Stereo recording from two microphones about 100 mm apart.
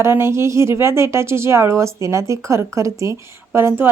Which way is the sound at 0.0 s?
25° right (ahead or behind).